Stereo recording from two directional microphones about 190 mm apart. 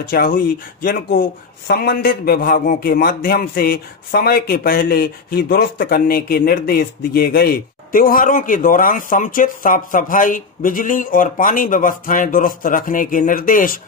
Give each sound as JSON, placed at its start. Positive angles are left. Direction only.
{"t": 0.1, "sound": "a man's voice", "side_deg": 50}